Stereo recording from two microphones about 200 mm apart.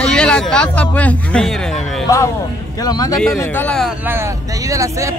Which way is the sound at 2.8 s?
20° left (ahead or behind).